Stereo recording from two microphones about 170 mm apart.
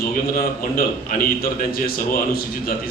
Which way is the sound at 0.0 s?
60° left (ahead or behind).